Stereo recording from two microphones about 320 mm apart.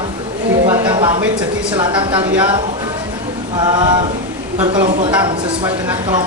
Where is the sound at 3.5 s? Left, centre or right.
Centre.